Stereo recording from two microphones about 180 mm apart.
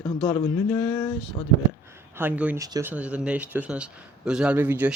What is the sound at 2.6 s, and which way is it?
Speech, 20° right (ahead or behind).